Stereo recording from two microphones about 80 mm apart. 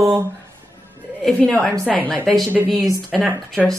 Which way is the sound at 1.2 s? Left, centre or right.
Centre.